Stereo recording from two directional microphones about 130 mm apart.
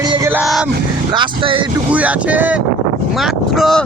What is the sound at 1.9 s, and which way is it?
Speech, 10° right (ahead or behind).